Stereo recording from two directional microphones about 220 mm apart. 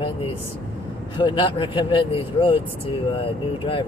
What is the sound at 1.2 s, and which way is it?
Speech, 20° left (ahead or behind).